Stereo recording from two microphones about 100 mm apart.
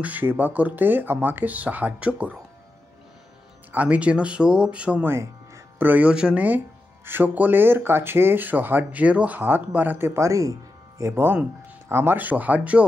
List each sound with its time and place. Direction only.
0.0 s speech: 20° right (ahead or behind)
3.7 s speech: 15° right (ahead or behind)